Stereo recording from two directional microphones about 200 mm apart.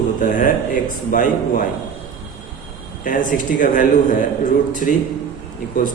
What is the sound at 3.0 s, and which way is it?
A man's voice, 40° left (ahead or behind).